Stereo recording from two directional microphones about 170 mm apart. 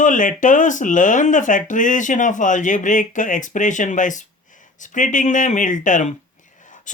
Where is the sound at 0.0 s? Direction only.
50° left (ahead or behind).